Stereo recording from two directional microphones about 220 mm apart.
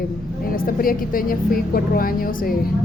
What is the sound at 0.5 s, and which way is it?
A woman's voice, 40° left (ahead or behind).